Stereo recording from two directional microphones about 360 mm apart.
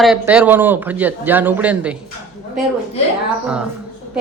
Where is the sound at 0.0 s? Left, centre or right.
Centre.